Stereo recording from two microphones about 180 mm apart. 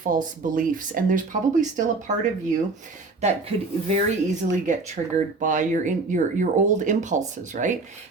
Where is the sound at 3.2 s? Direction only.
40° right (ahead or behind).